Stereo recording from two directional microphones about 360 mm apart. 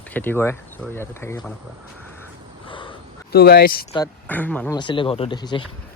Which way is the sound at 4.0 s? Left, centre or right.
Centre.